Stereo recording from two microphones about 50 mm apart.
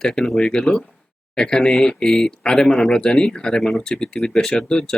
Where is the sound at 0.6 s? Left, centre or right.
Centre.